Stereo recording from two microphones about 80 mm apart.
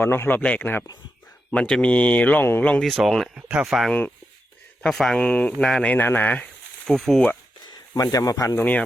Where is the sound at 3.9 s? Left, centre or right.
Centre.